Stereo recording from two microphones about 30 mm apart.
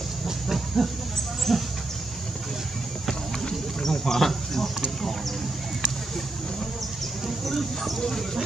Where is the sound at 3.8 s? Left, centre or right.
Centre.